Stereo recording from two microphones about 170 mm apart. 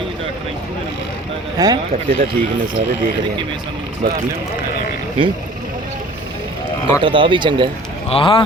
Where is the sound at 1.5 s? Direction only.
25° right (ahead or behind).